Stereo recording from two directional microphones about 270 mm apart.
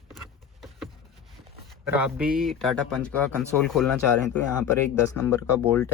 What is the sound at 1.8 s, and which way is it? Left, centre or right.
A man's voice, centre.